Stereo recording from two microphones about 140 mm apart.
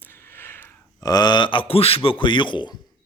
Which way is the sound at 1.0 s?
30° left (ahead or behind).